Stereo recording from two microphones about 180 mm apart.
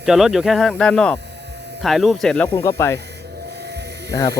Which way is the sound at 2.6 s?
15° left (ahead or behind).